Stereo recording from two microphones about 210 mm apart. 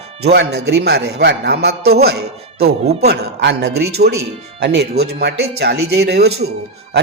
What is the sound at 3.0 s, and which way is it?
A man's voice, 50° right (ahead or behind).